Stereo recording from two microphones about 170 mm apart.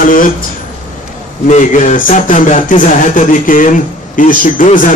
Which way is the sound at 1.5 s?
50° left (ahead or behind).